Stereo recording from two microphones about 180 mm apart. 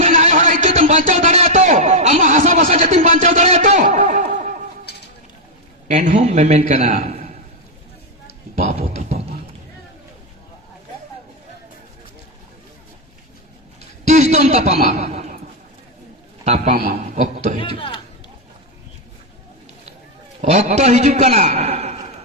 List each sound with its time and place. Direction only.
0.0 s a sound: 40° right (ahead or behind)
5.9 s a man's voice: 40° right (ahead or behind)
9.0 s beatboxing: 35° right (ahead or behind)
14.1 s a man's voice: 40° right (ahead or behind)
15.1 s a sound: 50° right (ahead or behind)
16.4 s a man's voice: 40° right (ahead or behind)
17.6 s speech: 25° left (ahead or behind)
20.4 s a man's voice: 40° right (ahead or behind)